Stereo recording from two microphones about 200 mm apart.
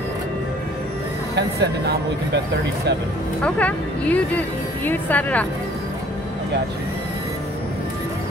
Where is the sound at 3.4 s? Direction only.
5° left (ahead or behind).